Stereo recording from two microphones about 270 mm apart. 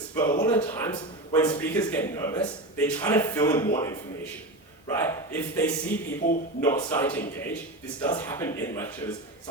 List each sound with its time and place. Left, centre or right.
0.2 s a man's voice: centre
4.9 s a man's voice: centre